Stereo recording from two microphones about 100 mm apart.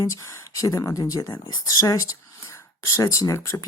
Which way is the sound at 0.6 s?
35° left (ahead or behind).